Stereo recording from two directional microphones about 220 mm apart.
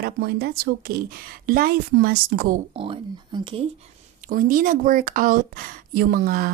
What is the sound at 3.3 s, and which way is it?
Speech, 20° right (ahead or behind).